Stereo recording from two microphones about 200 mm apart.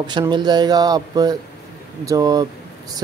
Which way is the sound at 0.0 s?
20° right (ahead or behind).